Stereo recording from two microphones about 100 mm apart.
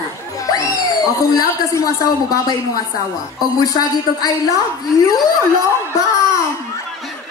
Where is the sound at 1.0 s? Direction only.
35° left (ahead or behind).